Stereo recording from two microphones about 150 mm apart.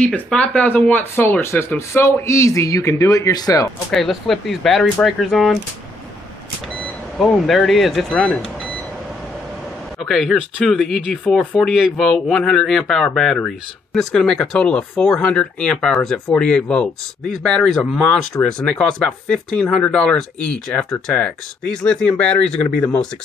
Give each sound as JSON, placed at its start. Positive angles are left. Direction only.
{"t": 0.0, "sound": "speech", "side_deg": 5}
{"t": 3.9, "sound": "speech", "side_deg": 0}
{"t": 7.2, "sound": "speech", "side_deg": 0}
{"t": 10.0, "sound": "speech", "side_deg": 0}